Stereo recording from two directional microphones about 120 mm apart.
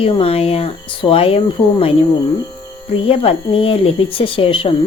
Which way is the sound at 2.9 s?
50° left (ahead or behind).